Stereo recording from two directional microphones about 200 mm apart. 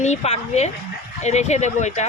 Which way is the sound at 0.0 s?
35° left (ahead or behind).